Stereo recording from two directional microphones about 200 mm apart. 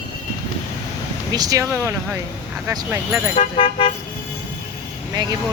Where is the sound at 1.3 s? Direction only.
20° right (ahead or behind).